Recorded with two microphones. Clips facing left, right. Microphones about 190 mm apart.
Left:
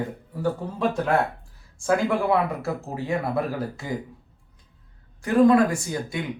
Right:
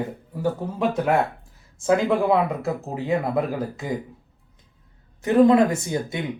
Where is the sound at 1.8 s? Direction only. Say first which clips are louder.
Right 3 dB; 20° right (ahead or behind).